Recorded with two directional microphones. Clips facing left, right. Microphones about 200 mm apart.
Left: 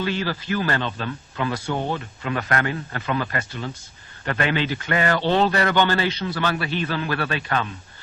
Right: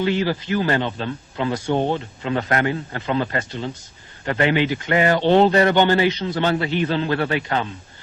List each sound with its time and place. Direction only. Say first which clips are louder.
0.0 s a man's voice: right 5 dB; 20° right (ahead or behind)